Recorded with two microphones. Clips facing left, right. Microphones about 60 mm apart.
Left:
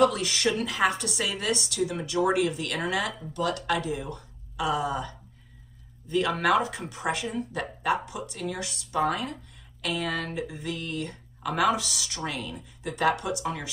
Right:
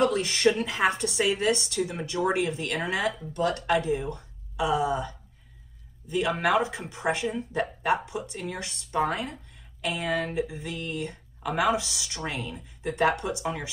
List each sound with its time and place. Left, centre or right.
0.0 s speech: right